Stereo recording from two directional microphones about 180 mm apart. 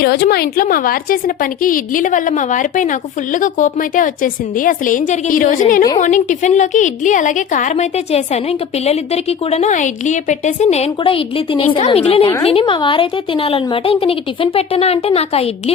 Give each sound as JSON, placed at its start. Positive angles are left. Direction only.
{"t": 0.0, "sound": "a woman's voice", "side_deg": 60}